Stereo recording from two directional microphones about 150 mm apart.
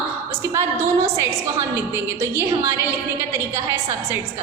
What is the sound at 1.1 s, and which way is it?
A woman's voice, 20° right (ahead or behind).